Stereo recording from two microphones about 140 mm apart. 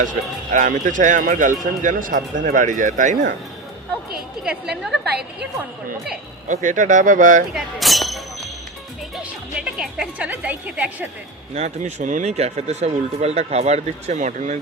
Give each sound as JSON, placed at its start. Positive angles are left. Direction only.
{"t": 0.5, "sound": "a man's voice", "side_deg": -70}
{"t": 4.4, "sound": "a woman's voice", "side_deg": -5}
{"t": 6.5, "sound": "speech", "side_deg": -65}
{"t": 7.5, "sound": "speech", "side_deg": 0}
{"t": 11.5, "sound": "speech", "side_deg": -55}